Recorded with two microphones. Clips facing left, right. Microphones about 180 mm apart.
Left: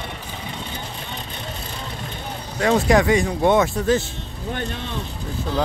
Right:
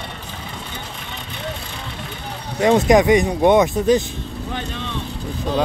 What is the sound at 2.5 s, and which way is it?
Speech, 20° right (ahead or behind).